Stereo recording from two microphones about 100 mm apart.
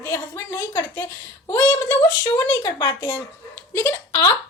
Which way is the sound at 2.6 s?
45° left (ahead or behind).